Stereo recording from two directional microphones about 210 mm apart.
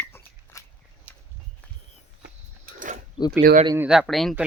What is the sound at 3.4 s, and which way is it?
Speech, 45° right (ahead or behind).